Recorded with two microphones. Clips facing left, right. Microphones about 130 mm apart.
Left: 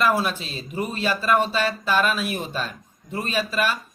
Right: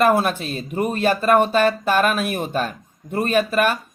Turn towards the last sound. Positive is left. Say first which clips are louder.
# right 6 dB
turn(degrees=-55)  # may be behind; listen again after turning